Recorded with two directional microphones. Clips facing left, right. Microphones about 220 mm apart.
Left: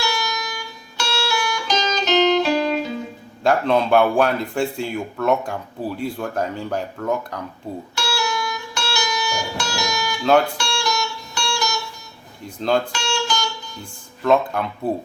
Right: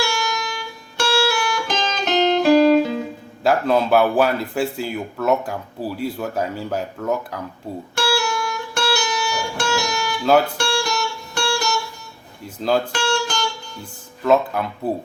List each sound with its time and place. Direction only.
0.0 s music: 55° right (ahead or behind)
3.4 s speech: 5° right (ahead or behind)
7.9 s music: 55° right (ahead or behind)
12.5 s speech: 5° right (ahead or behind)
12.9 s guitar: 55° right (ahead or behind)
14.3 s speech: 5° right (ahead or behind)